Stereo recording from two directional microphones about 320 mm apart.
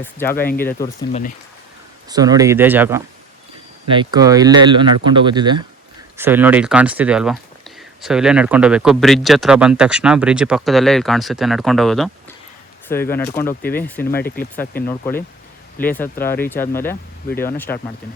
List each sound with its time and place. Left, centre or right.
0.0 s speech: centre
2.0 s speech: centre